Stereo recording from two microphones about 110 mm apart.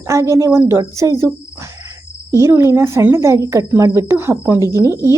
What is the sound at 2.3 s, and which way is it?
Speech, 25° right (ahead or behind).